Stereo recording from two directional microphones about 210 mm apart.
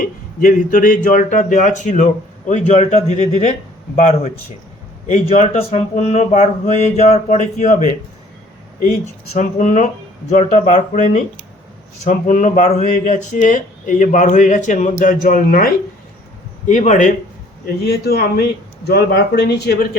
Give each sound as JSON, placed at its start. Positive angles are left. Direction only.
{"t": 0.0, "sound": "speech", "side_deg": 40}
{"t": 9.3, "sound": "speech", "side_deg": 40}
{"t": 17.8, "sound": "speech", "side_deg": 50}